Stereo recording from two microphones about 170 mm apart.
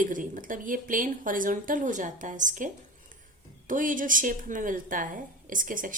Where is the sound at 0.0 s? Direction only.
50° right (ahead or behind).